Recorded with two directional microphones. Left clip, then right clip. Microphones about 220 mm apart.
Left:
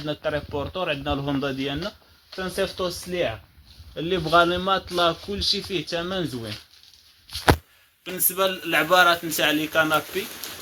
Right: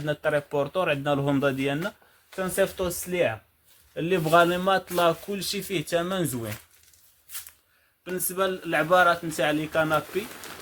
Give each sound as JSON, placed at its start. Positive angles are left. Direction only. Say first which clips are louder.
{"t": 0.0, "sound": "a man's voice", "louder": "right 1 dB", "side_deg": -55}
{"t": 8.0, "sound": "a man's voice", "louder": "left 3 dB", "side_deg": -45}